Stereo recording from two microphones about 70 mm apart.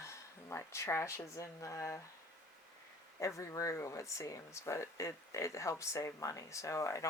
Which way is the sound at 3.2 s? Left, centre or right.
Left.